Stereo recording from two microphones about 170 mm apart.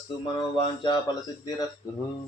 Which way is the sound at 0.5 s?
30° left (ahead or behind).